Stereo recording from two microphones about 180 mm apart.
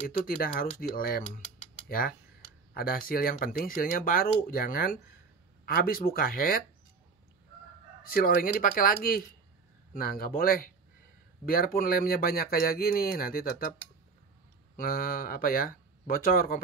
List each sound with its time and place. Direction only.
0.4 s speech: 55° left (ahead or behind)
8.0 s speech: 55° left (ahead or behind)
14.8 s speech: 55° left (ahead or behind)